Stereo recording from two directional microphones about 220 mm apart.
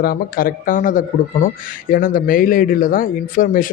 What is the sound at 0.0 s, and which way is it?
Speech, 40° left (ahead or behind).